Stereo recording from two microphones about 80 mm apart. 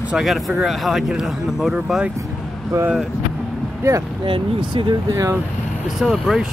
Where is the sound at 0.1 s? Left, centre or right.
Centre.